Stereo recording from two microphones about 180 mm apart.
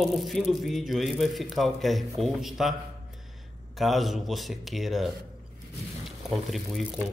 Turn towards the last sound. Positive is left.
turn(degrees=0)  # may be behind; listen again after turning